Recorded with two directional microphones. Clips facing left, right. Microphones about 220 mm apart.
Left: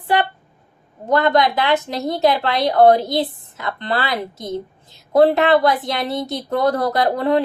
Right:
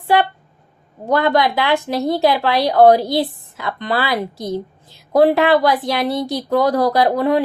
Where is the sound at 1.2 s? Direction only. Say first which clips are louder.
Even; 20° left (ahead or behind).